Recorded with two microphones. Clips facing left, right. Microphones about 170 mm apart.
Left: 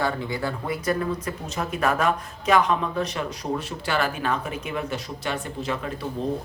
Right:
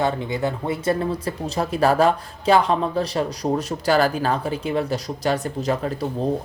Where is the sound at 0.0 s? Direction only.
20° right (ahead or behind).